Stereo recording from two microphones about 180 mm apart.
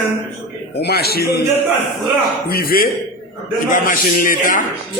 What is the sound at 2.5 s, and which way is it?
A man's voice, 55° left (ahead or behind).